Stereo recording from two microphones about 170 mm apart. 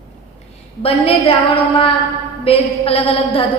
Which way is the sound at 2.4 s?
35° left (ahead or behind).